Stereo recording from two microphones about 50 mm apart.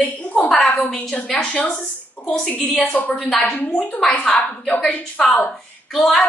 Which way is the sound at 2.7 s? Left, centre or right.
Left.